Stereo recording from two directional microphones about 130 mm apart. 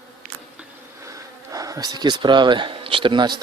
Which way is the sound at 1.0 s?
25° right (ahead or behind).